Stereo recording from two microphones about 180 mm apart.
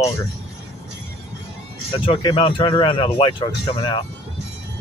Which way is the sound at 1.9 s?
30° left (ahead or behind).